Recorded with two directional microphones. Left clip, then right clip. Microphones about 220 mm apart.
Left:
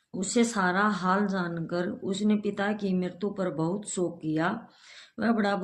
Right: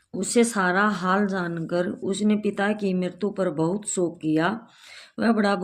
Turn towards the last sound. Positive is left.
turn(degrees=-45)  # may be behind; listen again after turning